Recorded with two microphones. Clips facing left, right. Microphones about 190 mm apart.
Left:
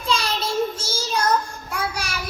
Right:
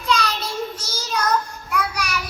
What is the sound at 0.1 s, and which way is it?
Child singing, 25° left (ahead or behind).